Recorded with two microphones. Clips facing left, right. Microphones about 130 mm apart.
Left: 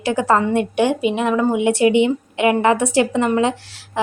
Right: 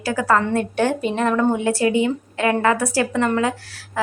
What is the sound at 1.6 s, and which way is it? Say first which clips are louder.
A woman's voice: left 4 dB; 20° left (ahead or behind).